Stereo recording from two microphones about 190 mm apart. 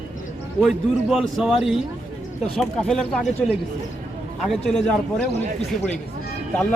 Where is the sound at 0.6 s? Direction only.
Centre (ahead or behind).